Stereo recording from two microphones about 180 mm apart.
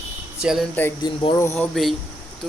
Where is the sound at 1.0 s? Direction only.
25° left (ahead or behind).